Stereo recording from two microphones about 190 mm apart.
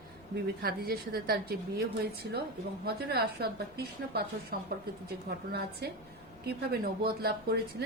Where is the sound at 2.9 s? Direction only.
55° right (ahead or behind).